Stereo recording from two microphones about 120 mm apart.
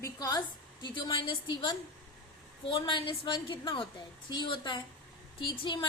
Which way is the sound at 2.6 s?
45° left (ahead or behind).